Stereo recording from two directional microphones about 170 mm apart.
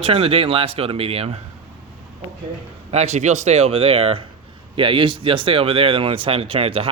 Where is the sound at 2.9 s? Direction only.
40° right (ahead or behind).